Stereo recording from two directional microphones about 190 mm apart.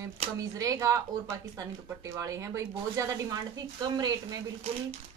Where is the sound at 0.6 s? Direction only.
15° right (ahead or behind).